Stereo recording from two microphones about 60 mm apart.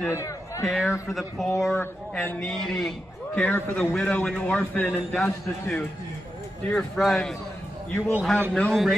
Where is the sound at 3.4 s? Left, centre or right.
Left.